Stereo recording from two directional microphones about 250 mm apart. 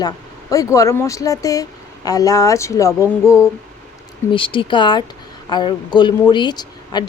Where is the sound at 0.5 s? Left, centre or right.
Centre.